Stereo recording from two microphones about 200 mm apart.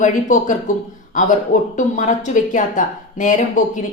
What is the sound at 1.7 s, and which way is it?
Speech, 40° left (ahead or behind).